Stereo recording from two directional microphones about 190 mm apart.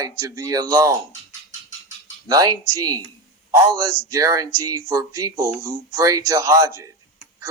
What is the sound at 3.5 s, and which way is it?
Speech, 20° right (ahead or behind).